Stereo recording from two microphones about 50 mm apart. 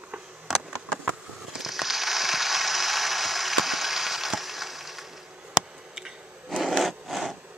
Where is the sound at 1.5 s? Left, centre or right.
Centre.